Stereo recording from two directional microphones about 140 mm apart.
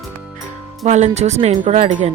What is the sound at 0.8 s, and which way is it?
Speech, 55° right (ahead or behind).